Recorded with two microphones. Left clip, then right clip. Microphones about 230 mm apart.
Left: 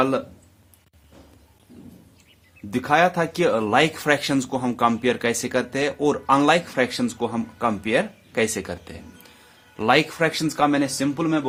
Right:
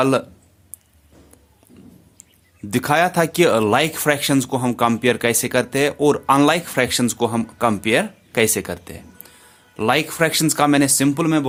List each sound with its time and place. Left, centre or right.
2.6 s speech: right